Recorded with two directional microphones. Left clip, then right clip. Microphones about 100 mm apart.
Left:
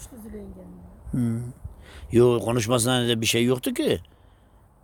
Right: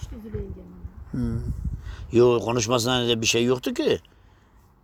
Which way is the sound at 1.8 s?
90° left.